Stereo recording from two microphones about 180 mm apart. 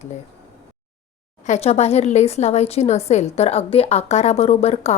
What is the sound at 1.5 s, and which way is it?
Speech, 35° left (ahead or behind).